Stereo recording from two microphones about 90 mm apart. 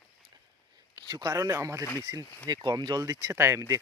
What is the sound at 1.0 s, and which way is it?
Speech, 45° right (ahead or behind).